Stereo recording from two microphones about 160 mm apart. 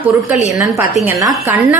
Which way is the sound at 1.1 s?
20° right (ahead or behind).